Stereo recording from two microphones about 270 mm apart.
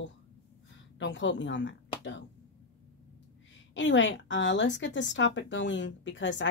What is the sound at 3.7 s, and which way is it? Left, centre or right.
A woman's voice, left.